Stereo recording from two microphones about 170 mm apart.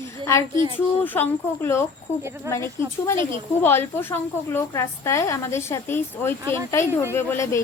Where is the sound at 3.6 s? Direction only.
15° left (ahead or behind).